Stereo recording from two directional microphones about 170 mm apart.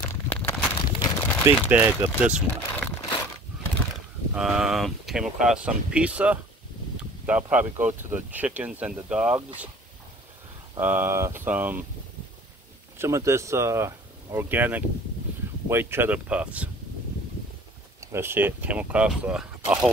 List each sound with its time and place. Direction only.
0.5 s a sound: 25° left (ahead or behind)
1.4 s speech: 15° right (ahead or behind)
4.3 s speech: 5° right (ahead or behind)
10.8 s speech: 10° right (ahead or behind)
12.9 s speech: 15° right (ahead or behind)
18.0 s speech: 15° right (ahead or behind)